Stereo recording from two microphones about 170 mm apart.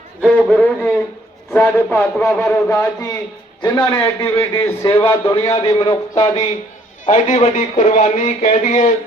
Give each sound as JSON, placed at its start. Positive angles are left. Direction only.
{"t": 0.2, "sound": "a man's voice", "side_deg": 5}
{"t": 7.0, "sound": "speech", "side_deg": 40}